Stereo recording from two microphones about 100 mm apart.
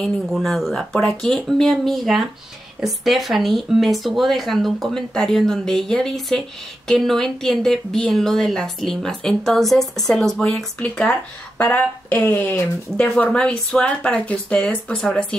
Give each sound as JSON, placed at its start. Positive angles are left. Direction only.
{"t": 0.0, "sound": "speech", "side_deg": 0}